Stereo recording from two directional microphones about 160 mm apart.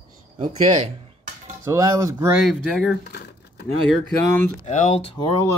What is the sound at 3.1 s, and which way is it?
Crumpling, 90° left.